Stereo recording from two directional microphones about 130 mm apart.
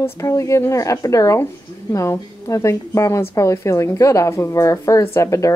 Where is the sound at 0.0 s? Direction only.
20° left (ahead or behind).